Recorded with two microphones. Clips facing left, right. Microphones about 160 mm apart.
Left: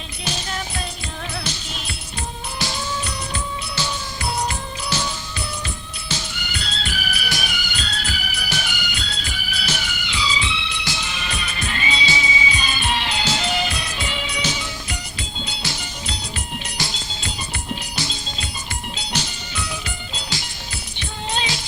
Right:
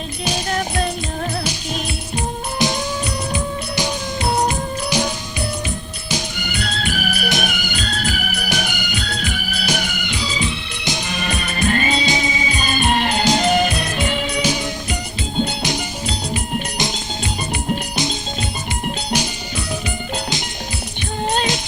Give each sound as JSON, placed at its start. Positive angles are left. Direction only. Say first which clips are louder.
{"t": 2.1, "sound": "music", "louder": "right 7 dB", "side_deg": -20}
{"t": 6.4, "sound": "music", "louder": "right 6 dB", "side_deg": -55}
{"t": 16.3, "sound": "music", "louder": "right 8 dB", "side_deg": -20}
{"t": 19.1, "sound": "music", "louder": "right 4 dB", "side_deg": -10}